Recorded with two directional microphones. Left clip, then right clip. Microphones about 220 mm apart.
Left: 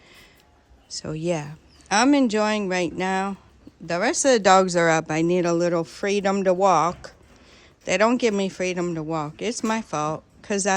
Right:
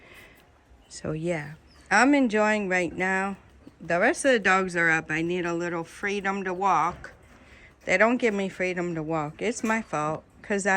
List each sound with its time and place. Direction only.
0.9 s speech: 5° left (ahead or behind); by 6.9 s 20° left (ahead or behind)
7.9 s speech: 10° left (ahead or behind)